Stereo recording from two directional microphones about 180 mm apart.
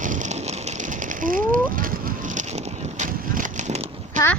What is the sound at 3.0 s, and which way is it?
Vehicle, 45° right (ahead or behind).